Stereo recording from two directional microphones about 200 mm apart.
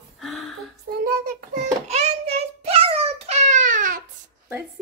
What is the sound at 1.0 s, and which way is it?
Child singing, 50° right (ahead or behind).